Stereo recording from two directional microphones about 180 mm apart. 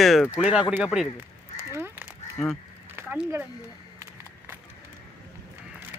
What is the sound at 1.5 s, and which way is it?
Crow, 15° right (ahead or behind).